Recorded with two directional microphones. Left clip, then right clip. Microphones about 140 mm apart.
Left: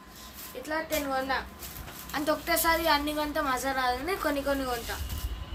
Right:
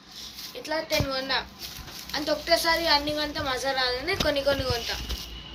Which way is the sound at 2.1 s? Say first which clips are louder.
Right 3 dB; 90° left.